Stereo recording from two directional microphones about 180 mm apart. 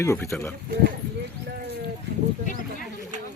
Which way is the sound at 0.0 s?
15° left (ahead or behind).